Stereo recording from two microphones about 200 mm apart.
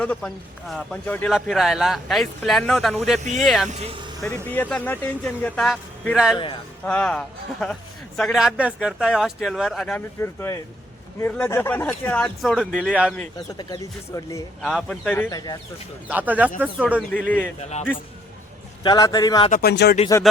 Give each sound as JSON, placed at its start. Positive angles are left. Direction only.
{"t": 0.0, "sound": "speech", "side_deg": 5}
{"t": 3.7, "sound": "speech", "side_deg": -30}
{"t": 4.5, "sound": "speech", "side_deg": 10}
{"t": 6.3, "sound": "a man's voice", "side_deg": 25}
{"t": 6.8, "sound": "speech", "side_deg": 5}
{"t": 13.5, "sound": "a man's voice", "side_deg": 20}
{"t": 14.6, "sound": "a man's voice", "side_deg": 0}
{"t": 16.0, "sound": "speech", "side_deg": -10}
{"t": 17.1, "sound": "a man's voice", "side_deg": 5}
{"t": 17.6, "sound": "speech", "side_deg": 35}
{"t": 18.8, "sound": "a man's voice", "side_deg": 20}
{"t": 19.5, "sound": "speech", "side_deg": 50}